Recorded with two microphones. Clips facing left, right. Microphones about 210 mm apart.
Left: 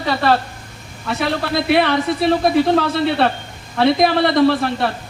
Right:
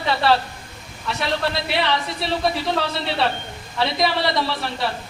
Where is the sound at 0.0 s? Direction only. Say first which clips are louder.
Left 2 dB; 45° left (ahead or behind).